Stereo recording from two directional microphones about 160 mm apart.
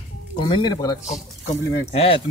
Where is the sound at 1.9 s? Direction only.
40° left (ahead or behind).